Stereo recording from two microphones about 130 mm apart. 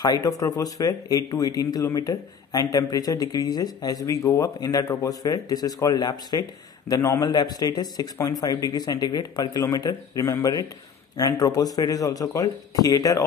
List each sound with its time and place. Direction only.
0.0 s speech: 25° left (ahead or behind)